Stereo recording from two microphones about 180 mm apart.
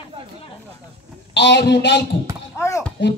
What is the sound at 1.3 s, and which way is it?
Speech, 70° left (ahead or behind).